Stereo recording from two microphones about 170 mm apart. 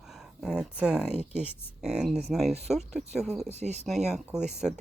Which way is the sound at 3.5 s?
40° right (ahead or behind).